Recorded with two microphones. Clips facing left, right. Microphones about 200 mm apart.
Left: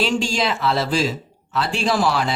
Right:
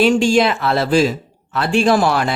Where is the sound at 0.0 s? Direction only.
55° right (ahead or behind).